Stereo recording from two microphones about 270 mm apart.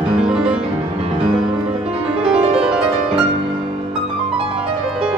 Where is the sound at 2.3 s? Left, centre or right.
Right.